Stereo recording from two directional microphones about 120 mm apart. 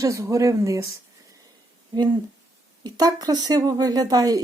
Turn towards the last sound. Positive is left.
turn(degrees=-30)  # may be behind; listen again after turning